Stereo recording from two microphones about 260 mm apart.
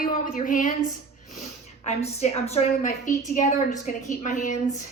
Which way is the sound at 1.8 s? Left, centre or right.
Left.